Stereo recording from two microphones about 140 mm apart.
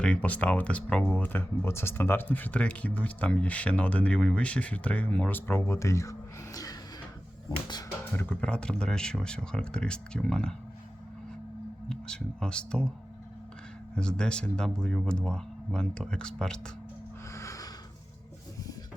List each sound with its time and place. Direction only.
0.0 s speech: 10° left (ahead or behind); by 6.7 s 25° left (ahead or behind)
7.5 s music: 30° left (ahead or behind)
8.1 s speech: 15° left (ahead or behind)
11.9 s speech: 5° left (ahead or behind)
13.9 s speech: 5° left (ahead or behind)
17.3 s music: 20° left (ahead or behind)